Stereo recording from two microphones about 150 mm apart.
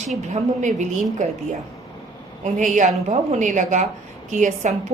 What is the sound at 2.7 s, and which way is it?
A woman's voice, 55° right (ahead or behind).